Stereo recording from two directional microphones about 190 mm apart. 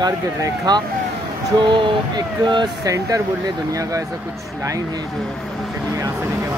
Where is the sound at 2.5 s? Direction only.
20° right (ahead or behind).